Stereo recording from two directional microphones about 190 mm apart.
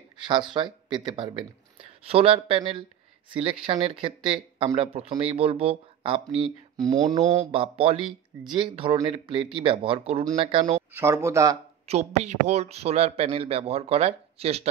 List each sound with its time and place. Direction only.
0.2 s speech: 25° right (ahead or behind)
10.9 s speech: 15° right (ahead or behind)
11.9 s speech: 35° right (ahead or behind)